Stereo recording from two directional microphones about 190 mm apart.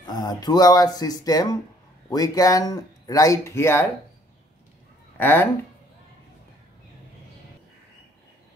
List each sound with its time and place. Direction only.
0.0 s speech: 20° left (ahead or behind)
5.1 s speech: 10° left (ahead or behind)